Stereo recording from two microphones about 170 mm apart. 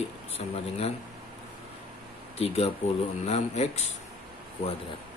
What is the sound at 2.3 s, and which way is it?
Speech, 35° left (ahead or behind).